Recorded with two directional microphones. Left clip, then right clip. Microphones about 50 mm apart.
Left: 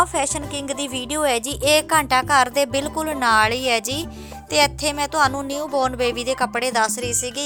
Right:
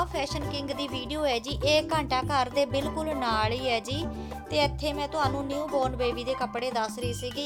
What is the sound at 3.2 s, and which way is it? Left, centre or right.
Speech, left.